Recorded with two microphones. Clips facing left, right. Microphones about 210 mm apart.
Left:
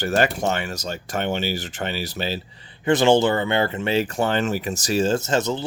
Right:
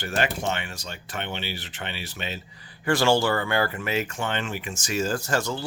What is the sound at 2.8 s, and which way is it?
Speech, 20° left (ahead or behind).